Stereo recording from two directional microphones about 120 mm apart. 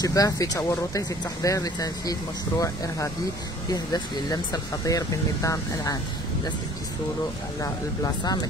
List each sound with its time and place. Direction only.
0.0 s speech: 30° left (ahead or behind)
7.6 s speech: 30° left (ahead or behind)